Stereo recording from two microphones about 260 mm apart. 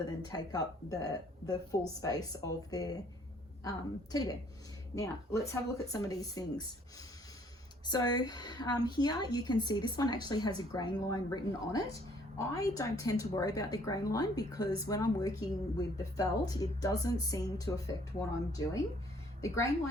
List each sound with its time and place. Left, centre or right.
0.0 s a woman's voice: centre
7.9 s a woman's voice: centre